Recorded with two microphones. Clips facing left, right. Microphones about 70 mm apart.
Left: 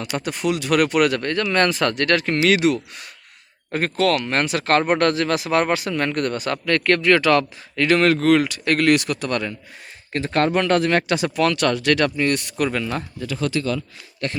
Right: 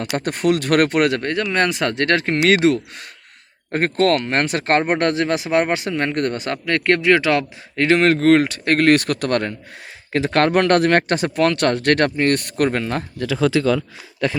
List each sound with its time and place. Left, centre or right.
0.3 s a man's voice: right
10.1 s speech: right
11.2 s speech: right
13.1 s speech: right